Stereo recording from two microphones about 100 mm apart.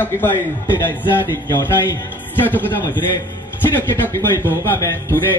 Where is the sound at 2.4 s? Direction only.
20° left (ahead or behind).